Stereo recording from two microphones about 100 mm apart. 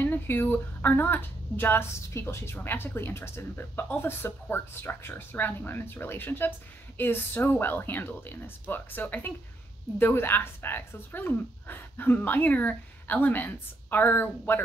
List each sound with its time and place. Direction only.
0.0 s speech: 20° left (ahead or behind)